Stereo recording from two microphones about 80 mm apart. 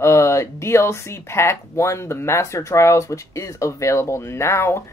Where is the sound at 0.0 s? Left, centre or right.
Left.